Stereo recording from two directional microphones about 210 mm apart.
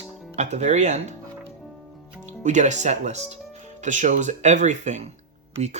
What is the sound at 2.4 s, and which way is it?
Speech, 35° right (ahead or behind).